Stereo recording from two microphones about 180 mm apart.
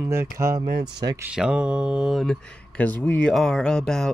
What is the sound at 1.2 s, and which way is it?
Speech, 5° right (ahead or behind).